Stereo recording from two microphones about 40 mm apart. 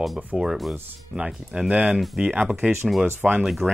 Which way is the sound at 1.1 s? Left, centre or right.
Centre.